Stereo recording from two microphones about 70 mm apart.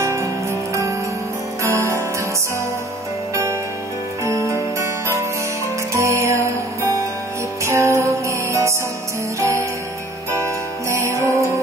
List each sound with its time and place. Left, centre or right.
0.0 s music: right
4.5 s music: right
7.6 s music: right